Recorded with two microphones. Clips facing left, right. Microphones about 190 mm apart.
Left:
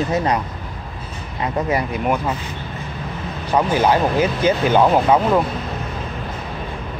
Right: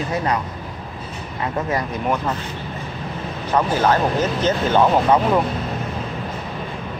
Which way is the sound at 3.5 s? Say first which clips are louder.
Left 1 dB; 10° left (ahead or behind).